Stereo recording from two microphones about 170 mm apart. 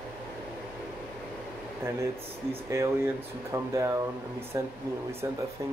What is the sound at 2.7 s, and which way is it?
Speech, 15° right (ahead or behind).